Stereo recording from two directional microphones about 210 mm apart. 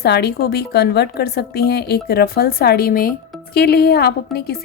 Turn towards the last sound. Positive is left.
turn(degrees=50)  # may be behind; listen again after turning